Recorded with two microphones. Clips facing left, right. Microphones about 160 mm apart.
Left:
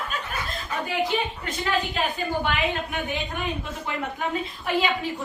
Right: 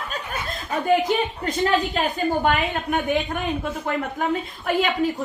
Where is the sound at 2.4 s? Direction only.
45° right (ahead or behind).